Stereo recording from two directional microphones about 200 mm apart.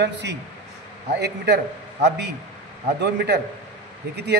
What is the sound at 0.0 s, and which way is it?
A man's voice, 60° right (ahead or behind).